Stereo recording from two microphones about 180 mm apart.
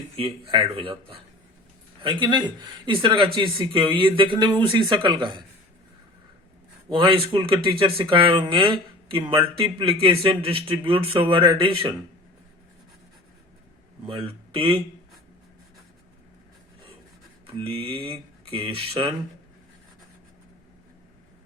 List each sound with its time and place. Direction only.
0.2 s speech: 30° right (ahead or behind)
6.9 s speech: 30° right (ahead or behind)
14.1 s speech: 30° right (ahead or behind)
17.4 s speech: 30° right (ahead or behind)